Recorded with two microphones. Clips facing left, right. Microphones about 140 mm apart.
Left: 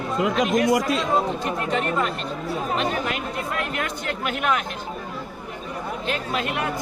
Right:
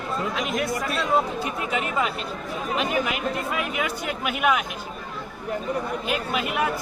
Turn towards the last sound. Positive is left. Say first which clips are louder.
# right 1 dB
turn(degrees=-5)  # may be behind; listen again after turning